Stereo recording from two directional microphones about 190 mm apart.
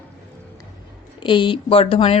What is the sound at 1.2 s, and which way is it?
Speech, 25° left (ahead or behind).